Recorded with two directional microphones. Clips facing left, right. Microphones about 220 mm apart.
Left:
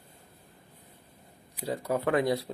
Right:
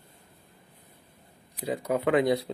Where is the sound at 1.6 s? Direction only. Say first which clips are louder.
Right 2 dB; 15° right (ahead or behind).